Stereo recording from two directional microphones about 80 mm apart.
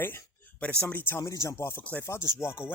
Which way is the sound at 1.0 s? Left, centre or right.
Left.